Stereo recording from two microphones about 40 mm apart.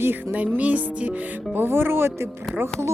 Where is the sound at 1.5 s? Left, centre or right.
Right.